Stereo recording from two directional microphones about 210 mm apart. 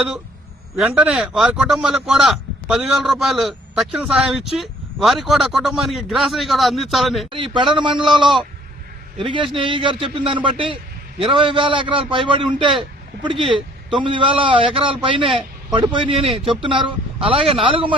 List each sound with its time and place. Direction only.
0.8 s a man's voice: 5° right (ahead or behind)
7.3 s a man's voice: 25° right (ahead or behind)
16.3 s a man's voice: centre (ahead or behind)
16.6 s a man's voice: 25° right (ahead or behind)